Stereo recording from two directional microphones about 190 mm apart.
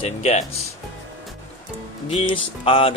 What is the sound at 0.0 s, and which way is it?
Speech, 35° left (ahead or behind).